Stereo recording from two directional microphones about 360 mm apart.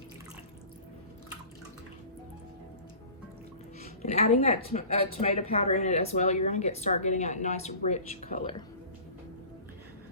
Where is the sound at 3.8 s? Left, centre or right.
Centre.